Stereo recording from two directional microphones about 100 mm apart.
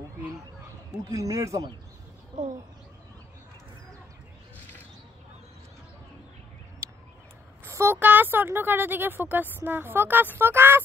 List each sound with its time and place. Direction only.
1.0 s speech: 35° right (ahead or behind)
6.8 s a sound: 25° right (ahead or behind)
7.6 s speech: 25° right (ahead or behind)